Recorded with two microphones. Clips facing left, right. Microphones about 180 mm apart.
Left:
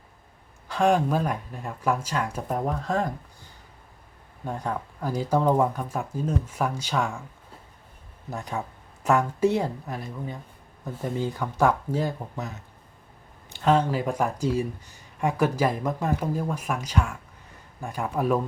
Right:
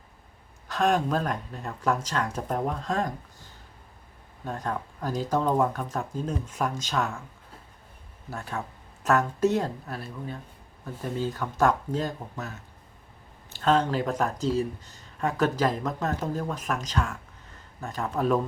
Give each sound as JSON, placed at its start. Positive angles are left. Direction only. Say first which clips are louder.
{"t": 0.7, "sound": "speech", "louder": "left 2 dB", "side_deg": 10}
{"t": 8.3, "sound": "speech", "louder": "left 2 dB", "side_deg": 15}